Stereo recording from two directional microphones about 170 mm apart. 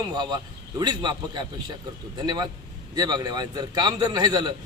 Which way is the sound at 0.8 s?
25° right (ahead or behind).